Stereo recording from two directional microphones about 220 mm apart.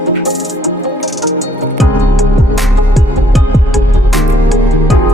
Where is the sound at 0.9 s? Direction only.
Centre (ahead or behind).